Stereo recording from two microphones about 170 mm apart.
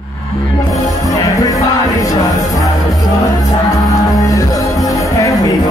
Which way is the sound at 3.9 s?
20° left (ahead or behind).